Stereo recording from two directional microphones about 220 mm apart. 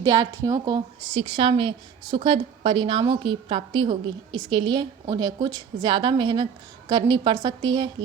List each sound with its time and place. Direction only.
0.0 s a woman's voice: 15° right (ahead or behind)